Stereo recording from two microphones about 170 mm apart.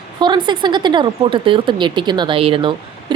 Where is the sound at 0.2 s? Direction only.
30° right (ahead or behind).